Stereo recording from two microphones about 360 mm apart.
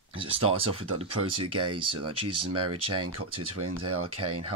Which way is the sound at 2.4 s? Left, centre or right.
Right.